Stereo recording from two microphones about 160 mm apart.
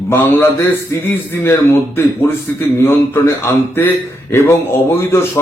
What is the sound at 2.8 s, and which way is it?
A man's voice, 15° left (ahead or behind).